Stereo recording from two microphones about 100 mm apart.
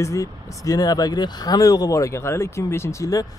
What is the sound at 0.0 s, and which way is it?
Speech, 30° left (ahead or behind).